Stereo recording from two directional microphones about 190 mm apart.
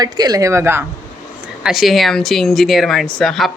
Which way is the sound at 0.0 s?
20° right (ahead or behind).